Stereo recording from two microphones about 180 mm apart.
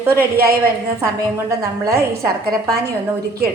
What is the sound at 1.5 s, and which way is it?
Speech, 15° right (ahead or behind).